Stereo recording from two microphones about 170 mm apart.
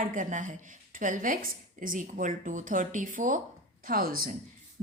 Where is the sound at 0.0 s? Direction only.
50° right (ahead or behind).